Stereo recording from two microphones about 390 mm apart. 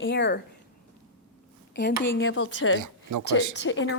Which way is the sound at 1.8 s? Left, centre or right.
Left.